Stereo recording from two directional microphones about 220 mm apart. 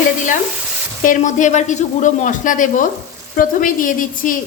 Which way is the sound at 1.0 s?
35° left (ahead or behind).